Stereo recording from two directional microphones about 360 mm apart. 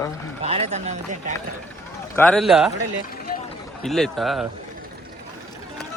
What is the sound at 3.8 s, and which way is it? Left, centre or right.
Speech, centre.